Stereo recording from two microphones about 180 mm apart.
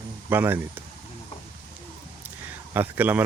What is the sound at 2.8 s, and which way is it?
Speech, 10° right (ahead or behind).